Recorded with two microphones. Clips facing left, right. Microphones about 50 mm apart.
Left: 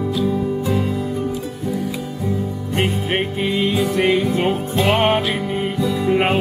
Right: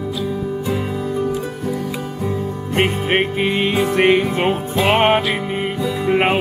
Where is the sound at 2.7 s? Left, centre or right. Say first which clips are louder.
Right 3 dB; right.